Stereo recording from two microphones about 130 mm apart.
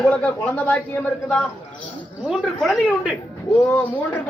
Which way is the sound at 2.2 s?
5° right (ahead or behind).